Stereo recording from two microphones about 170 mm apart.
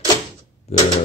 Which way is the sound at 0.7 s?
40° left (ahead or behind).